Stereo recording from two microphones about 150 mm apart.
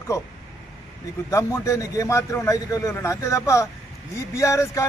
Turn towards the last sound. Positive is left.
turn(degrees=20)  # may be behind; listen again after turning